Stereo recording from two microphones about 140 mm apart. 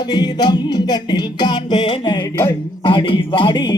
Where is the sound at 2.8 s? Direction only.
35° left (ahead or behind).